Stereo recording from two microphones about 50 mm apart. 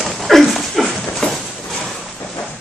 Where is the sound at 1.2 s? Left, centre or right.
Centre.